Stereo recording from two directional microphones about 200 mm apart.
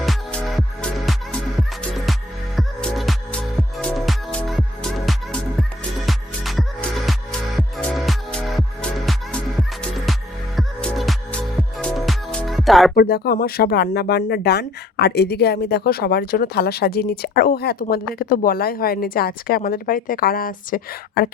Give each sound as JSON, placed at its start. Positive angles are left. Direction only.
{"t": 0.0, "sound": "music", "side_deg": 5}
{"t": 2.6, "sound": "music", "side_deg": 0}
{"t": 13.0, "sound": "speech", "side_deg": 50}